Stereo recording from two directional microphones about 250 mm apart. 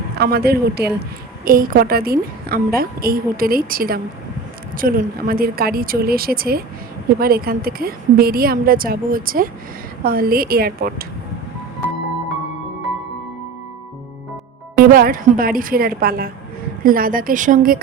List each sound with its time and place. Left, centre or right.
0.2 s a woman's voice: right
14.8 s a woman's voice: right